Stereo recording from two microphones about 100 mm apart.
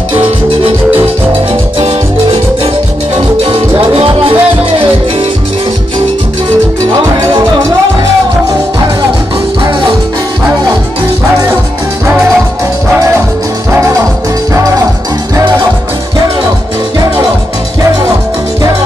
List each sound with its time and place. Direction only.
3.9 s music: 70° right (ahead or behind)